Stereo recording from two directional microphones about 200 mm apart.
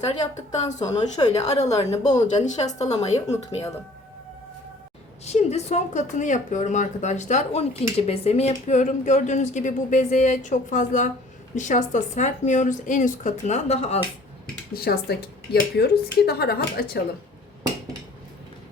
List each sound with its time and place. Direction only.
0.1 s speech: 35° left (ahead or behind)
5.2 s speech: 30° left (ahead or behind)
14.7 s speech: 50° left (ahead or behind)